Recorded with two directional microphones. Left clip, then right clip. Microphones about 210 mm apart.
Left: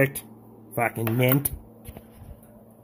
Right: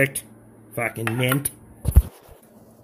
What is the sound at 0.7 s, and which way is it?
Speech, centre (ahead or behind).